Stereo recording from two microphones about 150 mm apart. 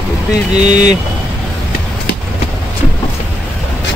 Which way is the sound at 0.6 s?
50° right (ahead or behind).